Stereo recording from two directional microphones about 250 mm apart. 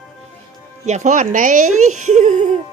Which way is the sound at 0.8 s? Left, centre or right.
Right.